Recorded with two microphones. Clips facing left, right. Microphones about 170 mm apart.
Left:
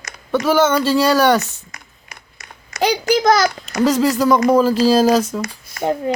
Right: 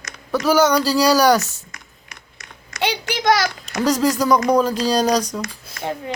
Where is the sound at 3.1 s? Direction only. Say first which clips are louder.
Left 4 dB; 35° left (ahead or behind).